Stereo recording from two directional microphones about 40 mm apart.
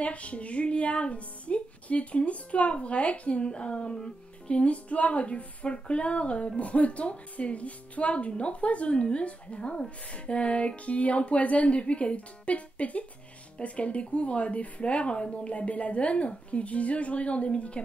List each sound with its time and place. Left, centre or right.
0.0 s music: left
9.0 s speech: left
10.9 s music: left